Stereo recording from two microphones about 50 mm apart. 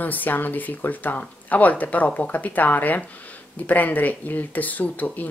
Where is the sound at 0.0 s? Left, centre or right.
Left.